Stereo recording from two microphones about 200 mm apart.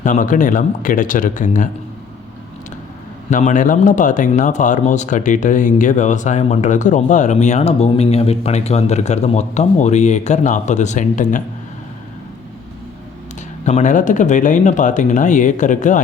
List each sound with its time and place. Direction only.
0.0 s speech: 40° left (ahead or behind)
3.2 s speech: 40° left (ahead or behind)
13.7 s speech: 35° left (ahead or behind)